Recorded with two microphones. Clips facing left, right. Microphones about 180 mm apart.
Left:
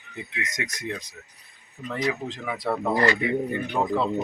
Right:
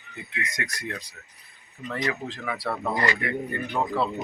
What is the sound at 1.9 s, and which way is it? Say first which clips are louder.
Speech: left 2 dB; centre (ahead or behind).